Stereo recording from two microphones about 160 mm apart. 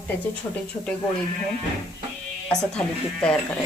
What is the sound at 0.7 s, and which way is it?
Speech, 25° left (ahead or behind).